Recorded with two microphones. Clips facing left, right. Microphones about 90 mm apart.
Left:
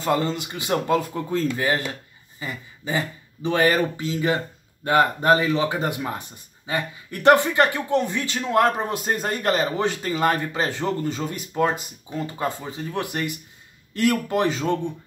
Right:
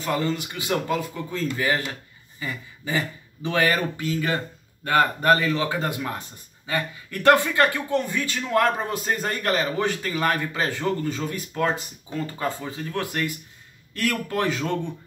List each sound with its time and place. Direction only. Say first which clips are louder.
0.0 s speech: left 2 dB; 30° left (ahead or behind)
2.4 s speech: even; 20° left (ahead or behind)